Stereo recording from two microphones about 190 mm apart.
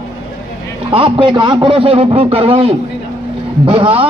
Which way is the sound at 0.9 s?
25° right (ahead or behind).